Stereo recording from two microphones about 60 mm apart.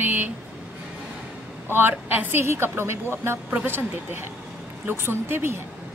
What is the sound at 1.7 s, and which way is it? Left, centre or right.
Speech, right.